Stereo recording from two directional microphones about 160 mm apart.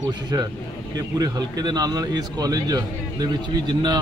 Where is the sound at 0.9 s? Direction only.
25° right (ahead or behind).